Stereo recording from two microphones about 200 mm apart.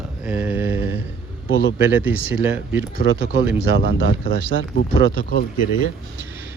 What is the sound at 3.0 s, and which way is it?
Speech, 65° right (ahead or behind).